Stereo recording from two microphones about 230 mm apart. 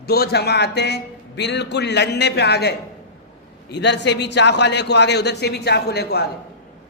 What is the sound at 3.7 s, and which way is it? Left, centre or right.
A man's voice, left.